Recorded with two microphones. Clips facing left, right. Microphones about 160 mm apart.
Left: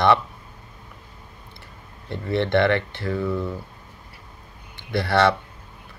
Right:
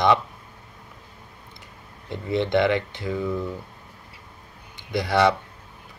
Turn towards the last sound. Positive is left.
turn(degrees=-15)  # may be behind; listen again after turning